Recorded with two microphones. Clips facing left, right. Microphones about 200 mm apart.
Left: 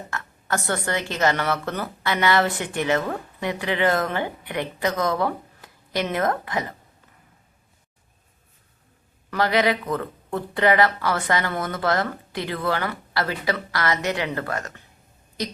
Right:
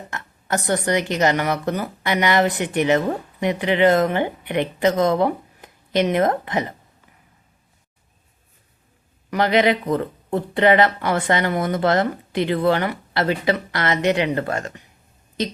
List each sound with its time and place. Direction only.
0.1 s a woman's voice: 20° right (ahead or behind)
9.3 s a woman's voice: 20° right (ahead or behind)